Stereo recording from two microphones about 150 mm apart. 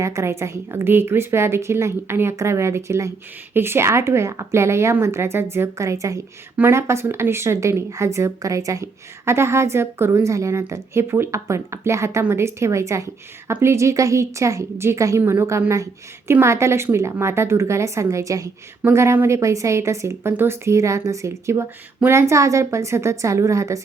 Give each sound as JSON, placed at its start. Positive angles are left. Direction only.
{"t": 0.0, "sound": "a woman's voice", "side_deg": -20}